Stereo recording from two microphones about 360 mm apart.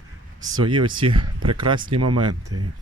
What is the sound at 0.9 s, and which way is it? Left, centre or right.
Speech, centre.